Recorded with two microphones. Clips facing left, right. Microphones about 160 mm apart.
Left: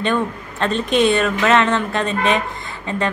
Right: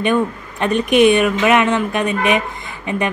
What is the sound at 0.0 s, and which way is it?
Speech, 15° right (ahead or behind).